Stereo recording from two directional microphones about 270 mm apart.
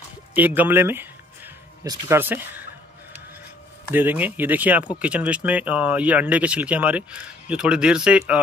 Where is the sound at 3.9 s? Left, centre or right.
Centre.